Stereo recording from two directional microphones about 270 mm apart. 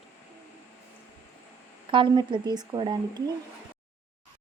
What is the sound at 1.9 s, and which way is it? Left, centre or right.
Speech, centre.